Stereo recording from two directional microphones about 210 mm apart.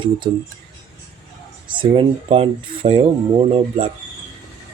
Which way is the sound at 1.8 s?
25° right (ahead or behind).